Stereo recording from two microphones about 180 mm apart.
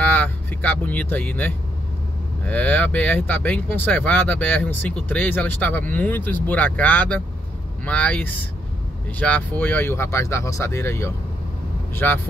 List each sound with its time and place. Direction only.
0.0 s speech: 10° left (ahead or behind)